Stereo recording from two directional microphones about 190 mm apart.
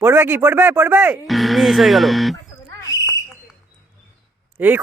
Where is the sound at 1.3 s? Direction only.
Centre (ahead or behind).